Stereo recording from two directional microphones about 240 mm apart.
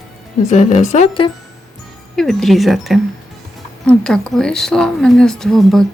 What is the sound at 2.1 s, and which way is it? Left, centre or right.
Speech, centre.